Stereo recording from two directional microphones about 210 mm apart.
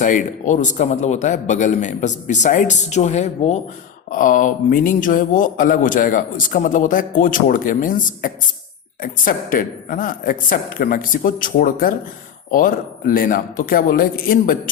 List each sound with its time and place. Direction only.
0.0 s a man's voice: 35° left (ahead or behind)